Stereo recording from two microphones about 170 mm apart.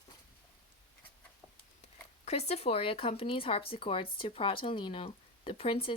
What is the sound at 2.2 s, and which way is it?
Speech, 40° left (ahead or behind).